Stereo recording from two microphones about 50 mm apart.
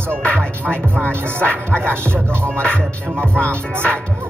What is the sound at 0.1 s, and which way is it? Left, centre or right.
Music, left.